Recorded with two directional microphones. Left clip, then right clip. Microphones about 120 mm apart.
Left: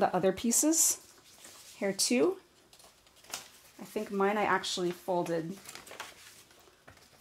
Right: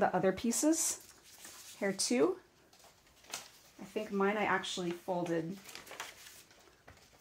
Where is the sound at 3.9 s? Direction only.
30° left (ahead or behind).